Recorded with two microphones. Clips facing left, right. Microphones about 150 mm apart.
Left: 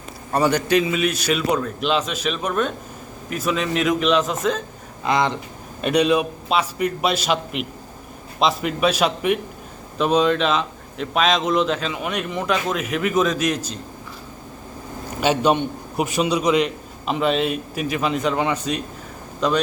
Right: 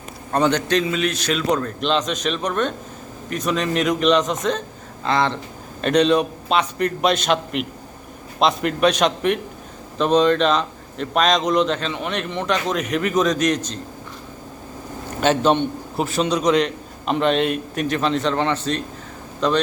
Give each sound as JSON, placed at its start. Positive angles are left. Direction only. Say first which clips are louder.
{"t": 0.3, "sound": "a man's voice", "louder": "even", "side_deg": 5}
{"t": 5.0, "sound": "a man's voice", "louder": "even", "side_deg": 15}
{"t": 15.2, "sound": "a man's voice", "louder": "right 1 dB", "side_deg": 10}